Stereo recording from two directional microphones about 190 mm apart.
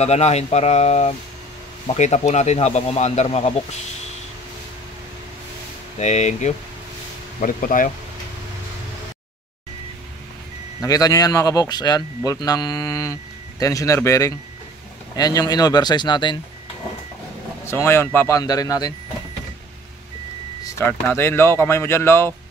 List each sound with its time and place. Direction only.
0.0 s speech: 35° left (ahead or behind)
5.9 s speech: 40° left (ahead or behind)
10.8 s speech: 15° left (ahead or behind)
17.6 s speech: 10° left (ahead or behind)
20.7 s speech: 10° left (ahead or behind)